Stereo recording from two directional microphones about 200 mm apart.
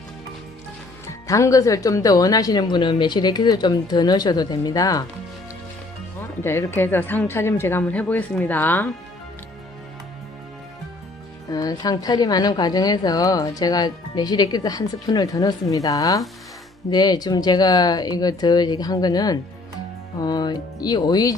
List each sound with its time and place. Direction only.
1.3 s a woman's voice: 15° left (ahead or behind)
6.4 s a woman's voice: 10° left (ahead or behind)
11.4 s a woman's voice: 20° left (ahead or behind)